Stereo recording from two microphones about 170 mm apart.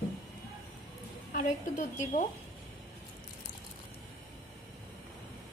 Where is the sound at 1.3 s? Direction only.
50° left (ahead or behind).